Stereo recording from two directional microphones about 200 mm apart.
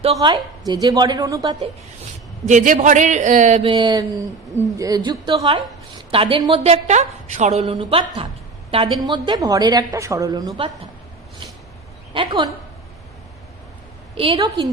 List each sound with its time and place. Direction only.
0.0 s a woman's voice: 25° right (ahead or behind)
2.5 s a man's voice: 40° right (ahead or behind); by 10.7 s 20° right (ahead or behind)
12.1 s a woman's voice: 25° right (ahead or behind)
14.2 s a woman's voice: 25° right (ahead or behind)